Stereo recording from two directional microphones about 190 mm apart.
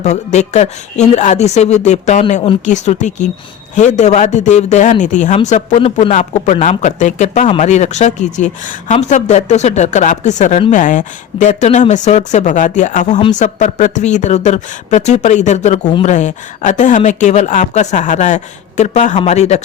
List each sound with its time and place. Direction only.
0.0 s speech: 35° left (ahead or behind)